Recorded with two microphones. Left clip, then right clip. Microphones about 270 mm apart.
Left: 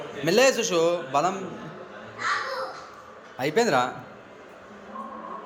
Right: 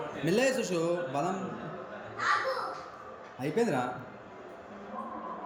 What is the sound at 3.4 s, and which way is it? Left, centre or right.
Speech, centre.